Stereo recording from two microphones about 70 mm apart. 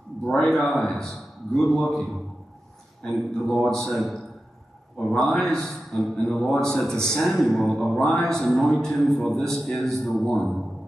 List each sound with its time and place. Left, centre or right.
0.2 s a man's voice: centre